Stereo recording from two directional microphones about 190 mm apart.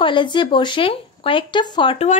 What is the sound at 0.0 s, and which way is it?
A woman's voice, 25° left (ahead or behind).